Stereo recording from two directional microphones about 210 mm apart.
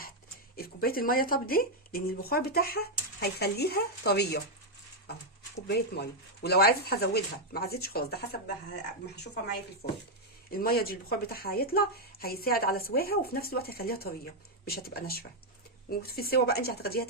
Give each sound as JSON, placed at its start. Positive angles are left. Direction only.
{"t": 0.5, "sound": "speech", "side_deg": 45}
{"t": 5.6, "sound": "speech", "side_deg": 50}